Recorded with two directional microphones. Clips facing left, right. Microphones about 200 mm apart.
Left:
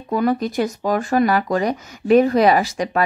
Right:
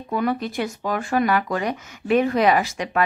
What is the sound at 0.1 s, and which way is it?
Speech, 40° left (ahead or behind).